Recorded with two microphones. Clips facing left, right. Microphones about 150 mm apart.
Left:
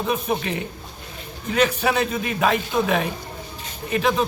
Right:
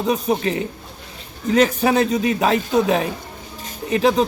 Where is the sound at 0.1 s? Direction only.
35° right (ahead or behind).